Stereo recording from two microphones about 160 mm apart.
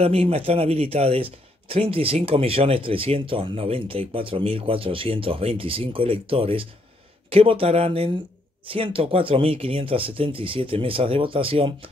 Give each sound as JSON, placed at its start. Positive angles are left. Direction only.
{"t": 0.0, "sound": "speech", "side_deg": -40}